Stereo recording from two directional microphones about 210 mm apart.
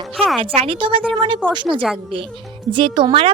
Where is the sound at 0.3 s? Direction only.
25° right (ahead or behind).